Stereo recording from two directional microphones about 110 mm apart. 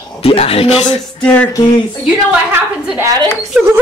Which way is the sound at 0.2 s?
60° left (ahead or behind).